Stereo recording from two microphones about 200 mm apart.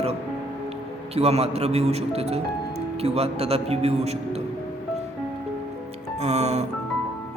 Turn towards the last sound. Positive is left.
turn(degrees=-35)  # may be behind; listen again after turning